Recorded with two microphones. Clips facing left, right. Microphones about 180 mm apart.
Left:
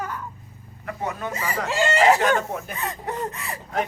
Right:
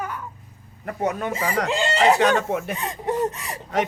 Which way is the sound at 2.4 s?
80° right.